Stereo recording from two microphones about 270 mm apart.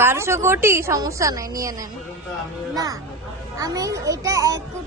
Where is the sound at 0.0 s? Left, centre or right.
Centre.